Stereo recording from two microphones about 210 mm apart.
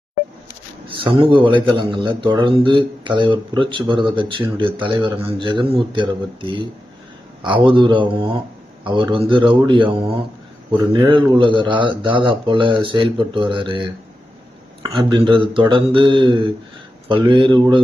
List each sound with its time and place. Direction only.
0.9 s a man's voice: 25° right (ahead or behind)
14.8 s a man's voice: 20° right (ahead or behind)